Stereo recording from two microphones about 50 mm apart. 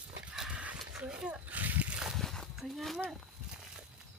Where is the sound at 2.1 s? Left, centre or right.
Centre.